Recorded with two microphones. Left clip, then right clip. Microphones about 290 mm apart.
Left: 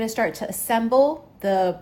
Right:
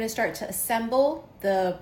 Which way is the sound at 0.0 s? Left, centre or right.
Left.